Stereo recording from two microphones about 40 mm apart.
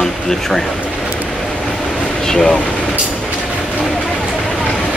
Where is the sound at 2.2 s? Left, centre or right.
Centre.